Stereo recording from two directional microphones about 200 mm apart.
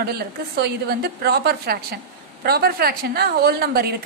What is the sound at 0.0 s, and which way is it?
A woman's voice, 50° right (ahead or behind).